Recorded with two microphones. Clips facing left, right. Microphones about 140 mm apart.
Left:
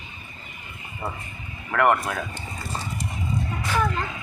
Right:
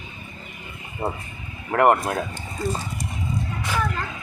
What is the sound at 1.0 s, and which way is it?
Speech, 30° right (ahead or behind).